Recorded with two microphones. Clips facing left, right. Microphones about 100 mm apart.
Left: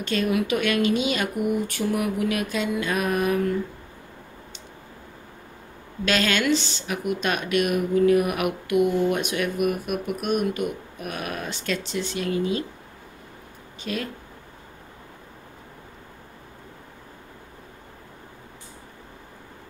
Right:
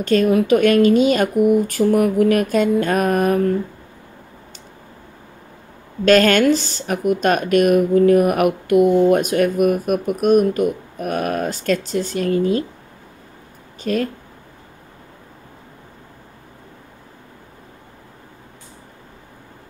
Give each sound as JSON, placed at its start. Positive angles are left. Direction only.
{"t": 0.0, "sound": "speech", "side_deg": -45}
{"t": 6.0, "sound": "speech", "side_deg": -50}
{"t": 13.8, "sound": "speech", "side_deg": -45}